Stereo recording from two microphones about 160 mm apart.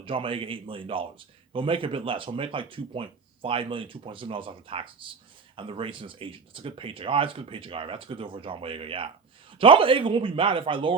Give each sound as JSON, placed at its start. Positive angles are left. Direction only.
{"t": 0.0, "sound": "speech", "side_deg": -35}